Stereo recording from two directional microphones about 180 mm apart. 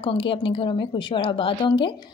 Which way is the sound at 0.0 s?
30° left (ahead or behind).